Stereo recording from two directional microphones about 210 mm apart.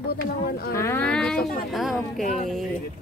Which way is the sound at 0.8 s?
10° left (ahead or behind).